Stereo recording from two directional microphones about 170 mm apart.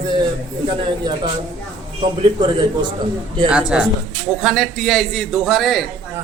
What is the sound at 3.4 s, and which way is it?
A man's voice, 5° right (ahead or behind).